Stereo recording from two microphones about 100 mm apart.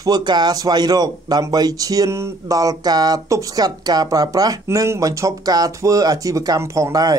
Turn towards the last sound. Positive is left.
turn(degrees=-35)  # may be behind; listen again after turning